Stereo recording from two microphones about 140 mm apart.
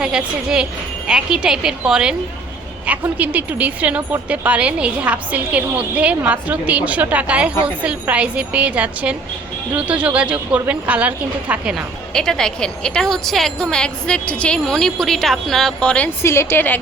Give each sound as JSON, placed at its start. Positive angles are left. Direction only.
{"t": 0.0, "sound": "a woman's voice", "side_deg": -5}
{"t": 12.1, "sound": "a woman's voice", "side_deg": 5}
{"t": 16.2, "sound": "a woman's voice", "side_deg": 20}